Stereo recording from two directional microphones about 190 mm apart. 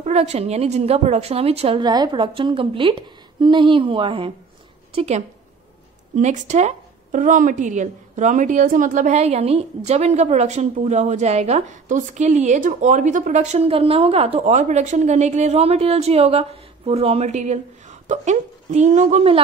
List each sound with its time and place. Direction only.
0.0 s a woman's voice: 35° right (ahead or behind)